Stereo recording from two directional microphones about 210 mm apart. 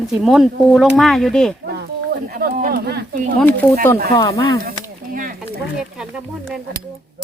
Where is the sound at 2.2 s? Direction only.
45° right (ahead or behind).